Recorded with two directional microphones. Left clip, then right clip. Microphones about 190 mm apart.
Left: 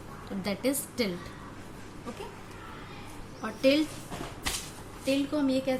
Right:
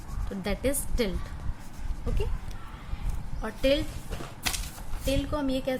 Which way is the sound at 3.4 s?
15° right (ahead or behind).